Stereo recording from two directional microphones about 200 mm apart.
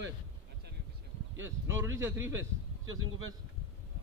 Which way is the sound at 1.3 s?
15° right (ahead or behind).